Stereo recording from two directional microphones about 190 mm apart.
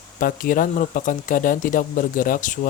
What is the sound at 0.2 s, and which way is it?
Speech, 45° left (ahead or behind).